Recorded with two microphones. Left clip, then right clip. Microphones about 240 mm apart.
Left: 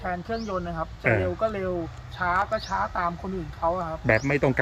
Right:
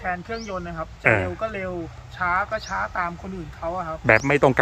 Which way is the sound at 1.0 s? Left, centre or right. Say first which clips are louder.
Right 4 dB; centre.